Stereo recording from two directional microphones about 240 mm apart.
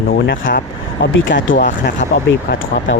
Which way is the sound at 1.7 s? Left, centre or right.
Left.